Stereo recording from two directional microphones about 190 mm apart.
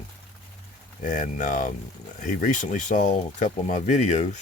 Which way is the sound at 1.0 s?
45° left (ahead or behind).